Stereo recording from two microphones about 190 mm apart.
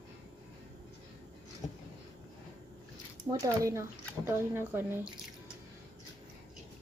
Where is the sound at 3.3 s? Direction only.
15° right (ahead or behind).